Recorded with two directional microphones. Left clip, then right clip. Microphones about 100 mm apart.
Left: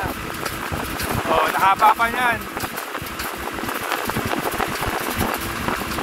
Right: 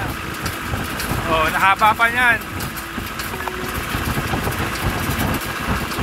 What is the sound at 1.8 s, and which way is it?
Speech, 15° left (ahead or behind).